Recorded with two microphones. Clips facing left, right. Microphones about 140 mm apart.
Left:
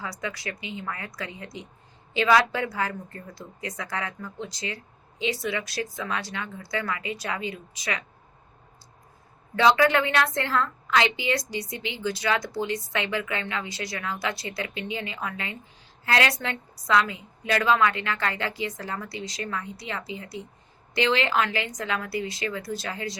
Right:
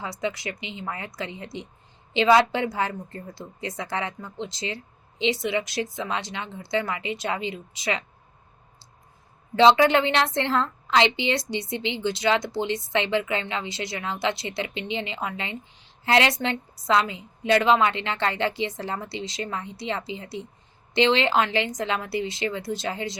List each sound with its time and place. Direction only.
0.0 s a woman's voice: 25° right (ahead or behind)
9.6 s a woman's voice: 25° right (ahead or behind)